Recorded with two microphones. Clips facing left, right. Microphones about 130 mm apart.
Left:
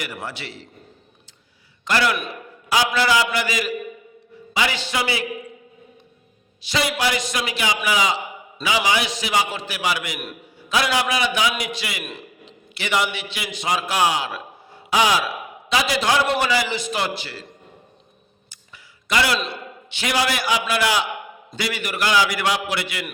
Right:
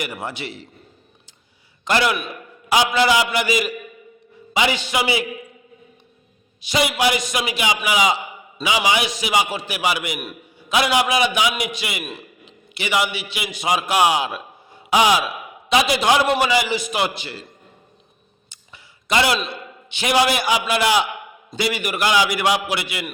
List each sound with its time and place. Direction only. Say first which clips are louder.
0.0 s a man's voice: right 3 dB; 20° right (ahead or behind)
1.8 s a man's voice: right 1 dB; 20° right (ahead or behind)
6.6 s a man's voice: right 3 dB; 15° right (ahead or behind)
19.0 s a man's voice: right 2 dB; 20° right (ahead or behind)